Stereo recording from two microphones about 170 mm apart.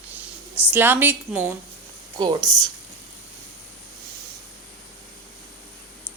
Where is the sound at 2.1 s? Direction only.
30° right (ahead or behind).